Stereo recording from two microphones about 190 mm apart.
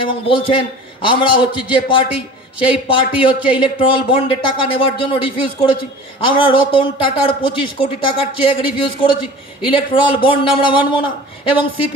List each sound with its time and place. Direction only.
0.0 s speech: 25° left (ahead or behind)